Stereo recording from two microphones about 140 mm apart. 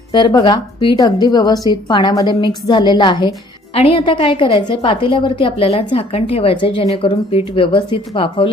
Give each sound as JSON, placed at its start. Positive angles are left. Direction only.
{"t": 0.1, "sound": "a woman's voice", "side_deg": 30}
{"t": 3.8, "sound": "a woman's voice", "side_deg": 45}